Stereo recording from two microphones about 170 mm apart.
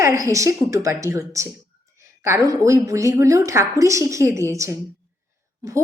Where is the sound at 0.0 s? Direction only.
15° right (ahead or behind).